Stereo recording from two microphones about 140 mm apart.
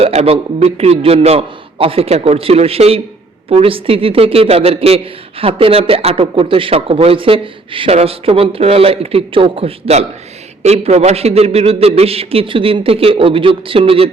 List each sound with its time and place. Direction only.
0.0 s speech: 50° right (ahead or behind)